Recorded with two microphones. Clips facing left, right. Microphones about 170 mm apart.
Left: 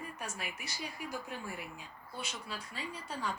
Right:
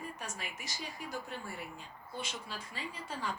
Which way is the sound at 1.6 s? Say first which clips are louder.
Right 1 dB; 5° left (ahead or behind).